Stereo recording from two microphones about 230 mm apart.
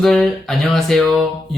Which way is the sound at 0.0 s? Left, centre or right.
Centre.